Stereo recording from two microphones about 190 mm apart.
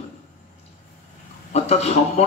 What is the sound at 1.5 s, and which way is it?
Speech, 35° left (ahead or behind).